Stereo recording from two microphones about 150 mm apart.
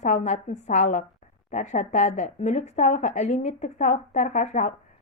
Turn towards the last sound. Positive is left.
turn(degrees=55)  # may be behind; listen again after turning